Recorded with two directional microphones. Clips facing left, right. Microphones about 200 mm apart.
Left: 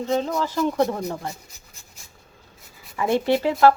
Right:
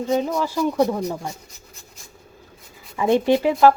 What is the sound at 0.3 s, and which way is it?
Speech, 10° right (ahead or behind).